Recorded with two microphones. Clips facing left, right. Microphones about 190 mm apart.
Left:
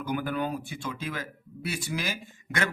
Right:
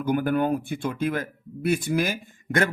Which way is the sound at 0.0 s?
55° right (ahead or behind).